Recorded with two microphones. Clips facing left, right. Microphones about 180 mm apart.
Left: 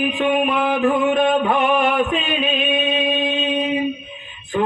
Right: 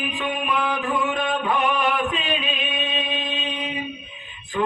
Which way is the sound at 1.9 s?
45° left (ahead or behind).